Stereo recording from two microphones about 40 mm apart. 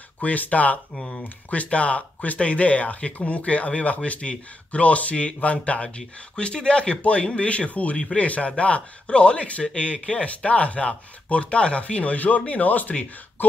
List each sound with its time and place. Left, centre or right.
0.2 s speech: left